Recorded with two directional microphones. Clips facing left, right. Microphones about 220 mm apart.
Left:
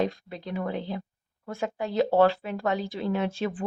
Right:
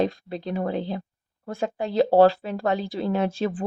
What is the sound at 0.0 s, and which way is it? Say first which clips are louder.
A woman's voice: right 4 dB; 30° right (ahead or behind).